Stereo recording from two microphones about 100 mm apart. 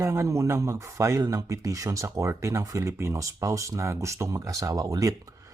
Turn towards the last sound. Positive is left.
turn(degrees=-35)  # may be behind; listen again after turning